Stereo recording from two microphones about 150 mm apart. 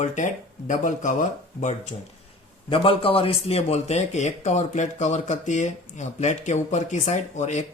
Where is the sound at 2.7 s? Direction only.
40° left (ahead or behind).